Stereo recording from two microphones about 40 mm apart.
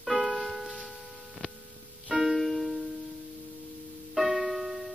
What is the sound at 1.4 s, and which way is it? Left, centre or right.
Music, left.